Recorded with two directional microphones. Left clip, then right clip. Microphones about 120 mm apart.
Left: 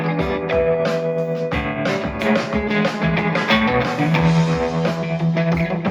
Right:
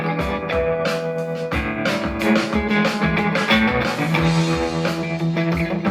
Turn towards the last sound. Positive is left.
turn(degrees=-25)  # may be behind; listen again after turning